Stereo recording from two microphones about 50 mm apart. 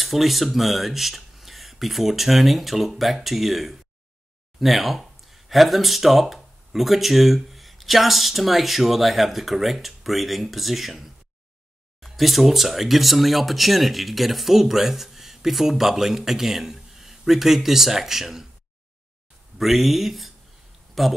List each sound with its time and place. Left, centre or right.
0.0 s speech: centre
19.6 s speech: centre